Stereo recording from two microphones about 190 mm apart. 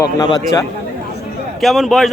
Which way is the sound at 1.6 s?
Centre (ahead or behind).